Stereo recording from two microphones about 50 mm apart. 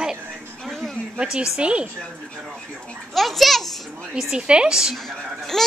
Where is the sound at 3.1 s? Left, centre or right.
Centre.